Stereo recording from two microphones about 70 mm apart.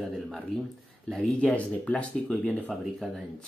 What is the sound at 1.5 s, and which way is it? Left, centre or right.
Speech, centre.